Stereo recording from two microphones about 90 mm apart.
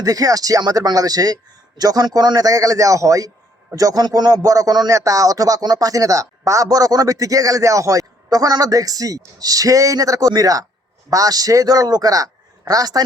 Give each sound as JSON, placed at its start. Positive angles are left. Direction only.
{"t": 0.0, "sound": "a man's voice", "side_deg": -40}